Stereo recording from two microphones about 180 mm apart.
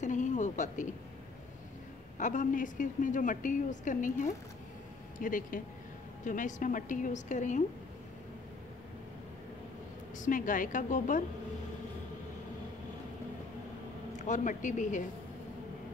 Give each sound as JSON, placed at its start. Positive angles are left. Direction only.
{"t": 0.0, "sound": "a sound", "side_deg": 45}
{"t": 2.1, "sound": "a woman's voice", "side_deg": 45}
{"t": 10.1, "sound": "a woman's voice", "side_deg": 45}
{"t": 14.1, "sound": "a woman's voice", "side_deg": 40}